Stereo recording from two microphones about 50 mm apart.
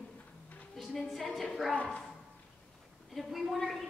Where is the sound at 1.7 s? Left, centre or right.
Left.